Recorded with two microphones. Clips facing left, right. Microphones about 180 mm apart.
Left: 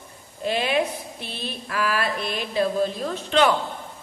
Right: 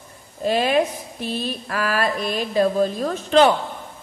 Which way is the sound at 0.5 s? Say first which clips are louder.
Right 4 dB; 40° right (ahead or behind).